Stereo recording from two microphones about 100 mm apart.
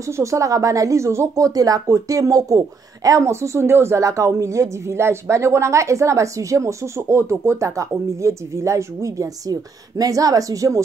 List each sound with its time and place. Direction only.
0.2 s speech: 35° right (ahead or behind)